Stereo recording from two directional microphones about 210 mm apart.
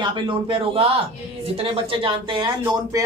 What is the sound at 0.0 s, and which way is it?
Speech, 25° right (ahead or behind).